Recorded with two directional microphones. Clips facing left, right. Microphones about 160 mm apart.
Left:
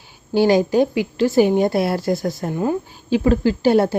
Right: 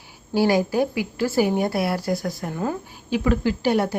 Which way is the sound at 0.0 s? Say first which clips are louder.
Left 4 dB; 25° left (ahead or behind).